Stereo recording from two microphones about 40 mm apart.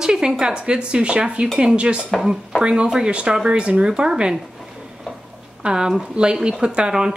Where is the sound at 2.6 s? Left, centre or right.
Right.